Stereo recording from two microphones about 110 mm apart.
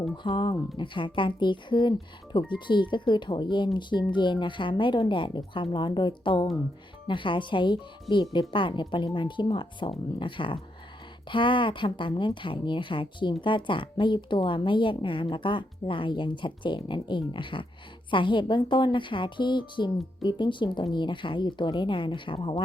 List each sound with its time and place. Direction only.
0.2 s a woman's voice: 45° left (ahead or behind)